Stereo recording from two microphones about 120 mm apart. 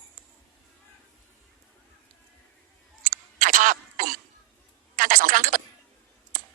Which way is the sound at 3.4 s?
90° right.